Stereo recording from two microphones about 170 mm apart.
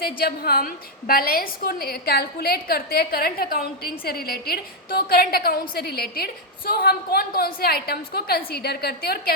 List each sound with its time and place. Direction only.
0.0 s a woman's voice: 65° left (ahead or behind)